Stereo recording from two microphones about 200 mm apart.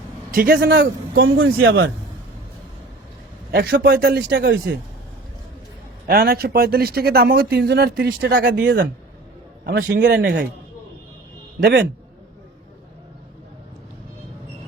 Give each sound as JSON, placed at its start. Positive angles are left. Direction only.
{"t": 0.3, "sound": "speech", "side_deg": -45}
{"t": 3.5, "sound": "speech", "side_deg": -50}
{"t": 6.1, "sound": "speech", "side_deg": -50}